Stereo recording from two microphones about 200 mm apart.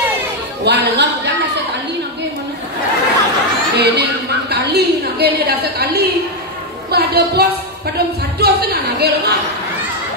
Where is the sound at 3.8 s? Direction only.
55° right (ahead or behind).